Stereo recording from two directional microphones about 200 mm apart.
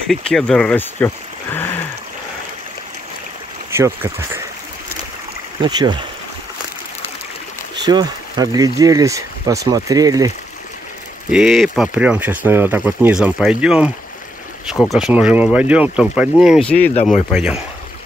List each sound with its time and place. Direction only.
0.1 s speech: 5° left (ahead or behind)
3.7 s speech: 10° right (ahead or behind)
5.6 s speech: 20° right (ahead or behind)
7.7 s speech: 20° right (ahead or behind)
11.2 s speech: centre (ahead or behind)
16.9 s speech: 35° left (ahead or behind)
17.3 s speech: 5° right (ahead or behind)